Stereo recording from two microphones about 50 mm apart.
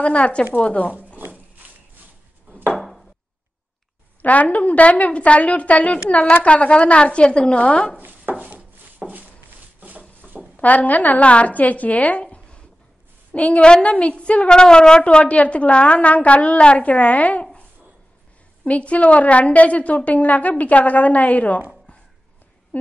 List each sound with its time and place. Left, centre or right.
0.0 s a woman's voice: left
0.9 s zipper: right
2.7 s a sound: centre
4.2 s speech: left
8.0 s a sound: right
10.5 s a woman's voice: left
18.6 s a woman's voice: left